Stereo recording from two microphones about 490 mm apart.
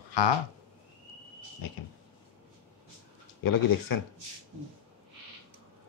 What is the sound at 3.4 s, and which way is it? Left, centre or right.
Speech, left.